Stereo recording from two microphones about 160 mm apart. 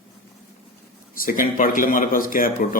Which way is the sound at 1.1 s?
60° left (ahead or behind).